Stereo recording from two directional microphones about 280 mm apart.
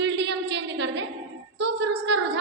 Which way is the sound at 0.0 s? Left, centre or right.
Right.